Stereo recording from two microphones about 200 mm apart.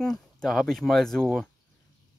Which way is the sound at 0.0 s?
Centre (ahead or behind).